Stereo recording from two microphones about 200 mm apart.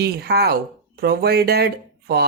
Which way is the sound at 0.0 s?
50° right (ahead or behind).